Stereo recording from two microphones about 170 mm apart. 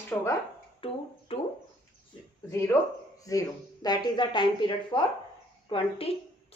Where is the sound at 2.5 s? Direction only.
15° left (ahead or behind); by 6.1 s 35° left (ahead or behind).